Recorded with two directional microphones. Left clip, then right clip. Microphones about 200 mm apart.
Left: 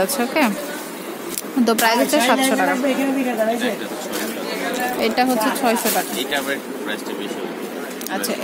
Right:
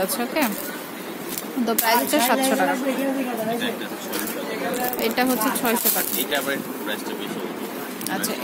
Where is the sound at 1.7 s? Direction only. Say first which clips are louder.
Left 4 dB; 10° left (ahead or behind).